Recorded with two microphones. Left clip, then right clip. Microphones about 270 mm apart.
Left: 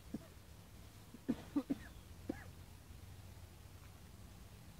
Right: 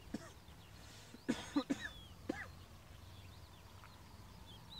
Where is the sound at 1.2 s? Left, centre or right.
Centre.